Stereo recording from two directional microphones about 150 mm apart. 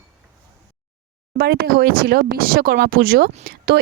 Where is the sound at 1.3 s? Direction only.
90° right.